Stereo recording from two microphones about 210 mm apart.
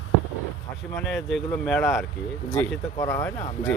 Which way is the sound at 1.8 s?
15° left (ahead or behind).